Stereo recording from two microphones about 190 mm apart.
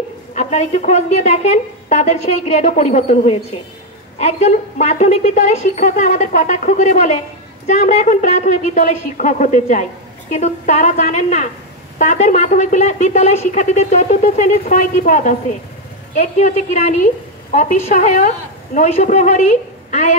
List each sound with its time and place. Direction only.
0.3 s speech: 35° left (ahead or behind)